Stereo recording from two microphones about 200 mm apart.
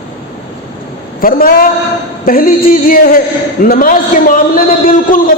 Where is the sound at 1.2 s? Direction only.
45° left (ahead or behind).